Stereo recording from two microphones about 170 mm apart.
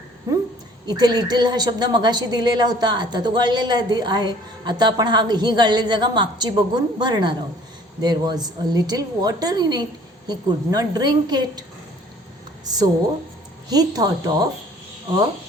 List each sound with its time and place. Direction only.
0.9 s a woman's voice: 25° right (ahead or behind)
12.6 s a woman's voice: 25° right (ahead or behind)